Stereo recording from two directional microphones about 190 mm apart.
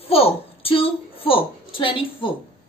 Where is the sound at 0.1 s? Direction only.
30° left (ahead or behind).